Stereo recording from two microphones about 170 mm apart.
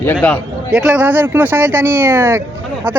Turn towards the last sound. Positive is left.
turn(degrees=-10)  # may be behind; listen again after turning